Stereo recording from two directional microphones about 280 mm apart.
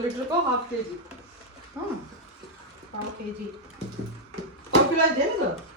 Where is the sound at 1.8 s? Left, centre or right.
Centre.